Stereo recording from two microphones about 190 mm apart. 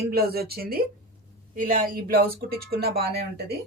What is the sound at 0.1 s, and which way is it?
Speech, 55° right (ahead or behind).